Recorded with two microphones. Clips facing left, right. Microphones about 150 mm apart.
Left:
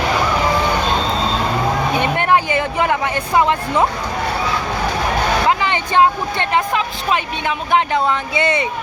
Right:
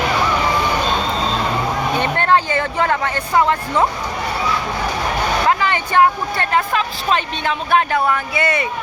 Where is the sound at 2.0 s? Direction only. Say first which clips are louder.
Right 1 dB; 15° left (ahead or behind).